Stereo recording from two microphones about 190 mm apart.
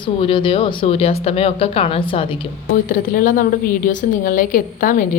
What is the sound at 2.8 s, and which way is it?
A woman's voice, 45° left (ahead or behind).